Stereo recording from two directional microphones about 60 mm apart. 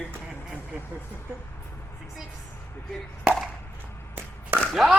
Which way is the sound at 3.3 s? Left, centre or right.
Right.